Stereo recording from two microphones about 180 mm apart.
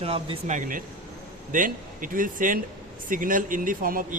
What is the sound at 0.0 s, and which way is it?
Speech, 30° right (ahead or behind).